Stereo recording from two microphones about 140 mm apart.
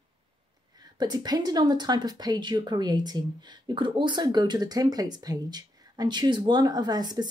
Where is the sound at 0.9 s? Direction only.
30° right (ahead or behind).